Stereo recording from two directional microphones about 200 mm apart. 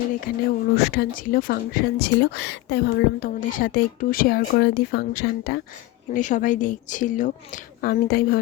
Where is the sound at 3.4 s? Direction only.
40° left (ahead or behind).